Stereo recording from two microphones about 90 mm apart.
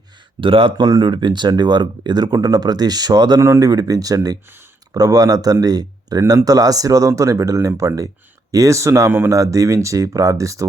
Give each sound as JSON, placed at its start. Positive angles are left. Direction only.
{"t": 0.3, "sound": "speech", "side_deg": -75}
{"t": 0.8, "sound": "speech", "side_deg": -50}
{"t": 3.4, "sound": "speech", "side_deg": -35}